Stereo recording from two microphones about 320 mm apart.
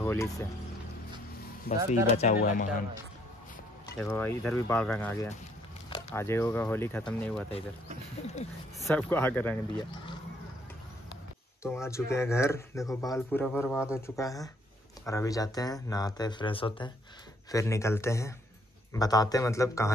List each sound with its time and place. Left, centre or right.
0.0 s music: centre
1.7 s speech: left
3.8 s speech: centre
8.7 s speech: centre
11.6 s speech: centre